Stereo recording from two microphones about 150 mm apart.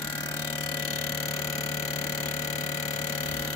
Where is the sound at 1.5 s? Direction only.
20° left (ahead or behind).